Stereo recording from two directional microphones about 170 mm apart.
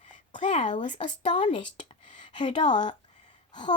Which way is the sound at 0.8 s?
45° left (ahead or behind).